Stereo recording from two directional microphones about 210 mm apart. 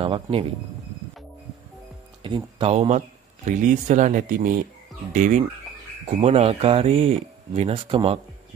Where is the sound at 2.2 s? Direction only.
25° right (ahead or behind).